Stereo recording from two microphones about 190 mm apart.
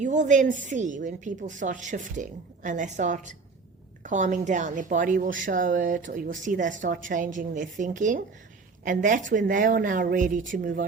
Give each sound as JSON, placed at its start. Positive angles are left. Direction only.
{"t": 0.0, "sound": "a woman's voice", "side_deg": -40}